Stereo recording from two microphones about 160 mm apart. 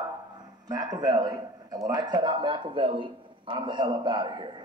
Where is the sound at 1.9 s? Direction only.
25° right (ahead or behind).